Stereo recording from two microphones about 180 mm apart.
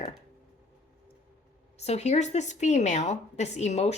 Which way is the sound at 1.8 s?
35° left (ahead or behind).